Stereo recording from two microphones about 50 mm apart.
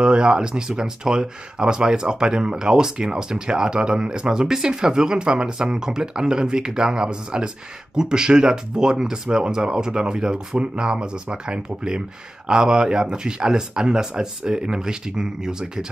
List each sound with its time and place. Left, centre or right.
0.0 s speech: centre